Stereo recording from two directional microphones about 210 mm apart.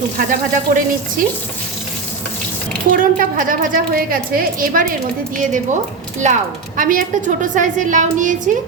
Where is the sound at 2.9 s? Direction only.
40° right (ahead or behind).